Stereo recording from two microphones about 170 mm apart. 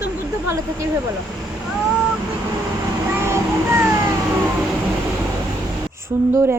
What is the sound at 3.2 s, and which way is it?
Child singing, 15° right (ahead or behind).